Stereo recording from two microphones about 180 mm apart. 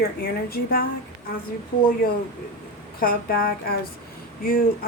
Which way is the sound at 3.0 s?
55° left (ahead or behind).